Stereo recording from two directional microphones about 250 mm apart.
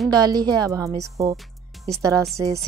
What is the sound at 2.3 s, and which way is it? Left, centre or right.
Speech, centre.